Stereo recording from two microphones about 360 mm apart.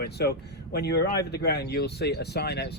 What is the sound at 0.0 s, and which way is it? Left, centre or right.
Speech, left.